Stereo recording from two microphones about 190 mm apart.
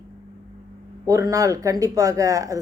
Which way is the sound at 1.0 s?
15° right (ahead or behind).